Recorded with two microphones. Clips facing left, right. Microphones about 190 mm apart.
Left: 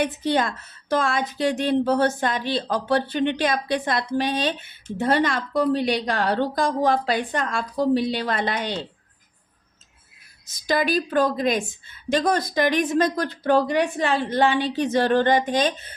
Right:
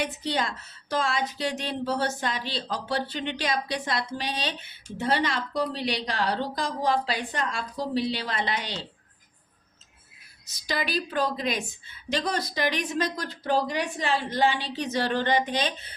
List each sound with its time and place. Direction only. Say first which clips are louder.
0.0 s a woman's voice: left 6 dB; 55° left (ahead or behind)
10.4 s a woman's voice: left 8 dB; 50° left (ahead or behind)